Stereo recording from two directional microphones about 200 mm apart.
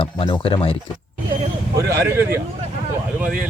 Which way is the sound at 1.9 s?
10° right (ahead or behind).